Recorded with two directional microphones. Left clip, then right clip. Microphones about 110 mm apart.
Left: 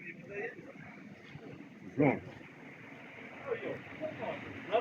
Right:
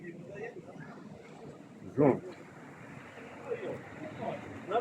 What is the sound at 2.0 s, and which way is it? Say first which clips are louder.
Speech: right 3 dB; 45° right (ahead or behind).